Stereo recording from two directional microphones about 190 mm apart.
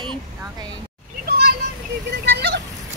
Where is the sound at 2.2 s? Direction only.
60° right (ahead or behind).